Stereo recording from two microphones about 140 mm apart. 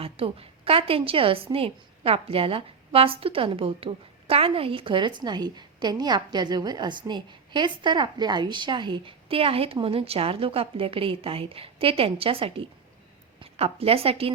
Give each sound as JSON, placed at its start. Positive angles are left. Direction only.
{"t": 0.0, "sound": "a woman's voice", "side_deg": -40}